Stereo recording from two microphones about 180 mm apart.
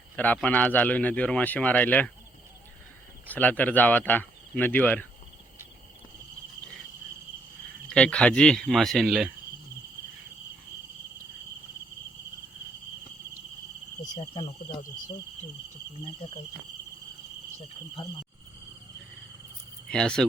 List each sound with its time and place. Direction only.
0.2 s a man's voice: 10° left (ahead or behind)
3.2 s a man's voice: 10° left (ahead or behind)
7.9 s speech: 5° left (ahead or behind)
14.2 s cricket: 25° left (ahead or behind)
18.0 s cricket: 25° left (ahead or behind)
19.9 s speech: 5° left (ahead or behind)